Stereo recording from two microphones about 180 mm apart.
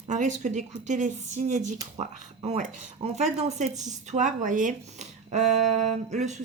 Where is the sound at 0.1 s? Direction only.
45° right (ahead or behind).